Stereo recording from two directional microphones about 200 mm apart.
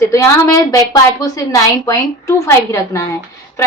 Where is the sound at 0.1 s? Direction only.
15° left (ahead or behind).